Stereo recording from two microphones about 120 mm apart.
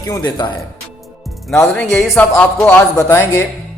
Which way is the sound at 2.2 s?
15° left (ahead or behind).